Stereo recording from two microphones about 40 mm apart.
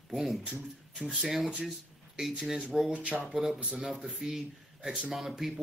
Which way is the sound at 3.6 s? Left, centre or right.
Centre.